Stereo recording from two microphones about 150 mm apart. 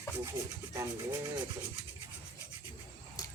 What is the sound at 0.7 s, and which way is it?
Rub, 20° right (ahead or behind).